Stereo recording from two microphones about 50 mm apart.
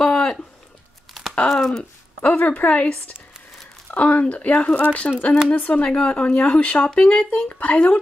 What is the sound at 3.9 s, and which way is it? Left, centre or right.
Speech, left.